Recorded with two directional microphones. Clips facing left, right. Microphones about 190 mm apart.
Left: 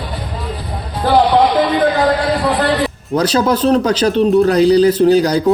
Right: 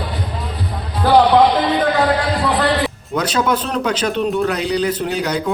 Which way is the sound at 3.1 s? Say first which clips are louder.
Left 4 dB; 35° left (ahead or behind).